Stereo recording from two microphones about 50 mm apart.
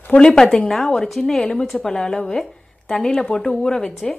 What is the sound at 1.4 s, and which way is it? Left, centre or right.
A woman's voice, centre.